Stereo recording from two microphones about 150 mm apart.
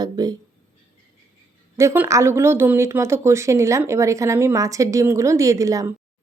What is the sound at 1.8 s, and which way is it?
Speech, 15° right (ahead or behind).